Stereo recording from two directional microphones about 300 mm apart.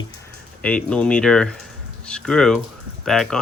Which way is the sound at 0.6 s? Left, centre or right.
Centre.